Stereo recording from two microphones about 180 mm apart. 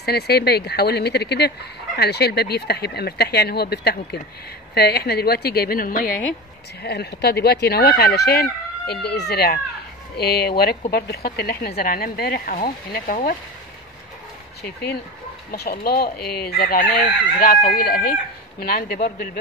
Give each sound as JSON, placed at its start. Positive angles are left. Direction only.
{"t": 0.0, "sound": "speech", "side_deg": 60}
{"t": 6.8, "sound": "speech", "side_deg": 65}
{"t": 14.6, "sound": "speech", "side_deg": 60}